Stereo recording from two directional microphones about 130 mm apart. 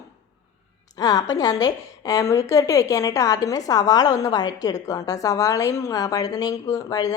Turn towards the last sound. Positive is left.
turn(degrees=30)  # may be behind; listen again after turning